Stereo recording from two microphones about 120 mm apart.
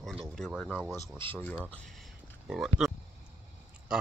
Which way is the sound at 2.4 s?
5° right (ahead or behind).